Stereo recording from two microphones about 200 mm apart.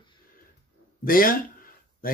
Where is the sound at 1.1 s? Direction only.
45° left (ahead or behind).